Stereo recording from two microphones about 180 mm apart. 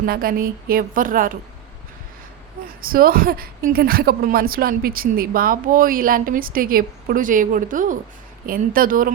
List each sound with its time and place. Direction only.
0.0 s a woman's voice: 55° right (ahead or behind)
2.8 s a woman's voice: 55° right (ahead or behind)